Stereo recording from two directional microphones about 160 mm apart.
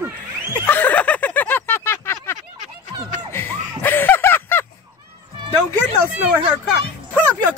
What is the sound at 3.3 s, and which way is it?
Music, 15° left (ahead or behind).